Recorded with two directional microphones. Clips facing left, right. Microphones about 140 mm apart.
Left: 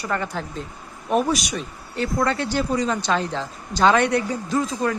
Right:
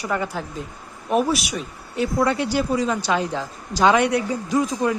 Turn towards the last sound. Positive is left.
turn(degrees=-15)  # may be behind; listen again after turning